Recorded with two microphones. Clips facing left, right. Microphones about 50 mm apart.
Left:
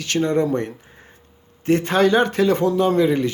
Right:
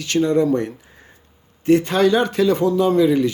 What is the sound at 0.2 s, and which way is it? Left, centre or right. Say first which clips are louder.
A man's voice: right 3 dB; left.